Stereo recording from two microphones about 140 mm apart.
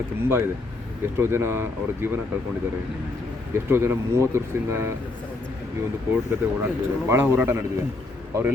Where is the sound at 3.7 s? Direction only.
15° right (ahead or behind).